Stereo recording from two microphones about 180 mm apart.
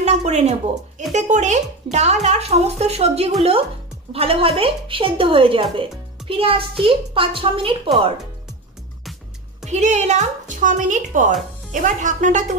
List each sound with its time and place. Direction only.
0.0 s a woman's voice: 40° right (ahead or behind)
9.7 s a woman's voice: 40° right (ahead or behind)